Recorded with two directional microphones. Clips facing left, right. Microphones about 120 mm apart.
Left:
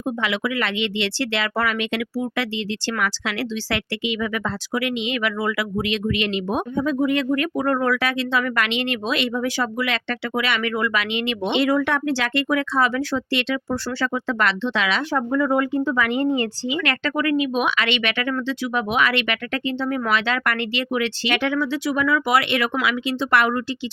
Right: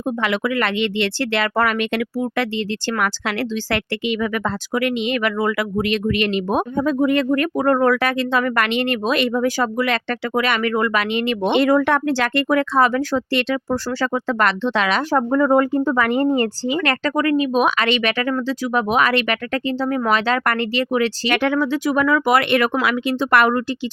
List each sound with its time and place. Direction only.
0.2 s speech: 50° right (ahead or behind)